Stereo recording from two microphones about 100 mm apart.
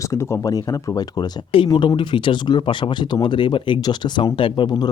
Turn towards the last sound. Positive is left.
turn(degrees=55)  # may be behind; listen again after turning